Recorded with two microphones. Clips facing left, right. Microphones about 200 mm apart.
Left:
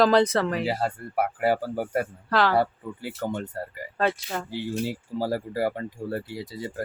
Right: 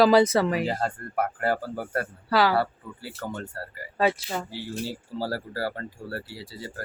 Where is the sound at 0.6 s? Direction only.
10° left (ahead or behind).